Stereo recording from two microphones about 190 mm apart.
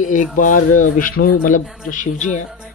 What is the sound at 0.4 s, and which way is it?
Speech, 45° left (ahead or behind).